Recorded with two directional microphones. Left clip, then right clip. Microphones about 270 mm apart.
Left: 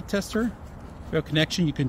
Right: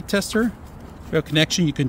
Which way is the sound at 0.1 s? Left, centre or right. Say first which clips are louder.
Right 6 dB; centre.